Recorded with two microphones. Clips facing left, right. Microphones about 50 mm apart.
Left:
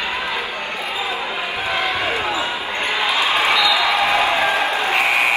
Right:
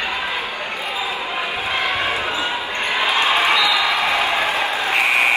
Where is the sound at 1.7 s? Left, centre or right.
Right.